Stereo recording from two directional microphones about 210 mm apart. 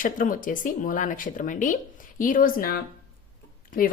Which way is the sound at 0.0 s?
40° left (ahead or behind).